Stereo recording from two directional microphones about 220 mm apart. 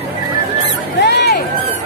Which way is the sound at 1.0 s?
50° left (ahead or behind).